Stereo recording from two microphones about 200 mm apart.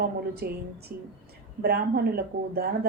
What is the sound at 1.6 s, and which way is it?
Speech, 50° right (ahead or behind).